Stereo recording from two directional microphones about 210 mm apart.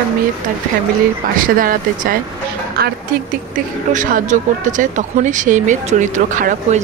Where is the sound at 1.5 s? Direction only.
40° right (ahead or behind).